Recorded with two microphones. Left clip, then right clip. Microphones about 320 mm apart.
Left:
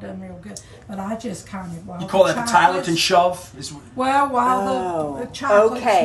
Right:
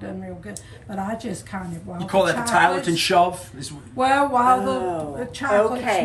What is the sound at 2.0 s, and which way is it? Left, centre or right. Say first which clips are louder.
A woman's voice: left 3 dB; centre.